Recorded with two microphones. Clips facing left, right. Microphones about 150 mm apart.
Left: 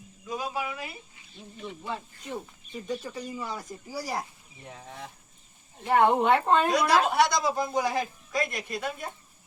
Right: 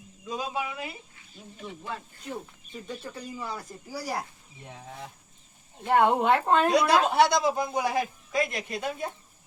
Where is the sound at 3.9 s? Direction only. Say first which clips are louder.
Even; 10° left (ahead or behind).